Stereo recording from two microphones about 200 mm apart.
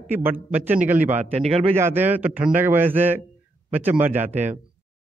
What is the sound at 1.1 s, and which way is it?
Speech, 35° right (ahead or behind).